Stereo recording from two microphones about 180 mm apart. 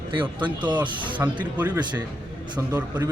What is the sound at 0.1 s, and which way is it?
A man's voice, 25° right (ahead or behind).